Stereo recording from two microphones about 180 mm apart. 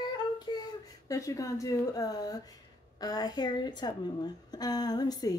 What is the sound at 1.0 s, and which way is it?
Female singing, 20° left (ahead or behind).